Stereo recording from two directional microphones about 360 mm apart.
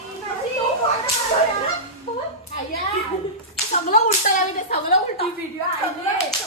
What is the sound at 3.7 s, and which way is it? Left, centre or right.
A woman's voice, centre.